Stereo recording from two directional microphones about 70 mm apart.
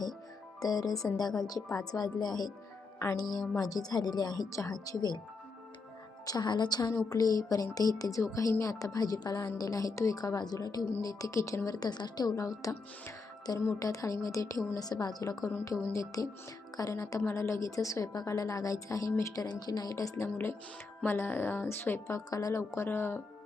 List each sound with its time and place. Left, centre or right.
0.6 s a woman's voice: left
6.2 s a woman's voice: left
6.9 s a woman's voice: left
8.2 s a woman's voice: left
10.2 s speech: left
11.0 s a woman's voice: left
12.3 s speech: left
14.8 s a woman's voice: left
19.5 s a woman's voice: left
20.2 s speech: left
22.0 s speech: left